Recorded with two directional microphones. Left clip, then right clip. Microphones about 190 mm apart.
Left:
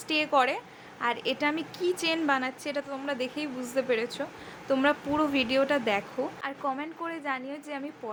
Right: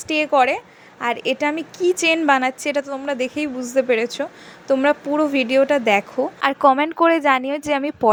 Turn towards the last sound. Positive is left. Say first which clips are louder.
# right 16 dB
turn(degrees=-50)  # may be behind; listen again after turning